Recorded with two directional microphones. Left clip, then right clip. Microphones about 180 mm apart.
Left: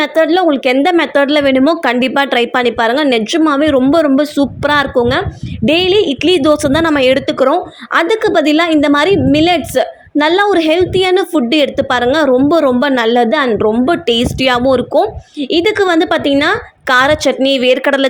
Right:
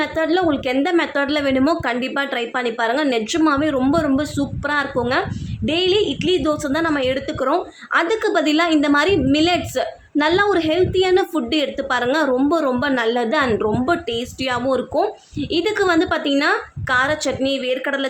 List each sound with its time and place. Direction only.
0.0 s a woman's voice: 35° left (ahead or behind)
14.1 s a woman's voice: 45° left (ahead or behind)